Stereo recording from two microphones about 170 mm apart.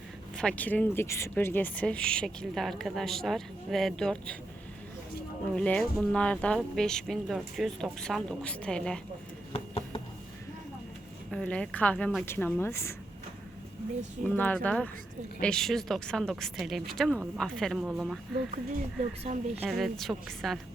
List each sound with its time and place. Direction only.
0.3 s speech: 5° left (ahead or behind)
5.5 s speech: 5° left (ahead or behind)
9.5 s a sound: 35° left (ahead or behind)
11.3 s speech: 5° left (ahead or behind)
14.3 s speech: 10° left (ahead or behind)
19.2 s speech: 35° right (ahead or behind)
19.6 s speech: centre (ahead or behind)